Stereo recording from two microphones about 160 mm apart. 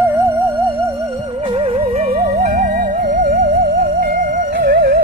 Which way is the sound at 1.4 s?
35° right (ahead or behind).